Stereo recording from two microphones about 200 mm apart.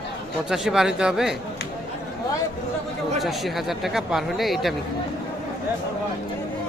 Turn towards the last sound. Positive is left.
turn(degrees=0)  # may be behind; listen again after turning